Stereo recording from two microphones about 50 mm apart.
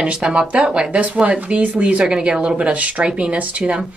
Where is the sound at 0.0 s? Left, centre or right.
Right.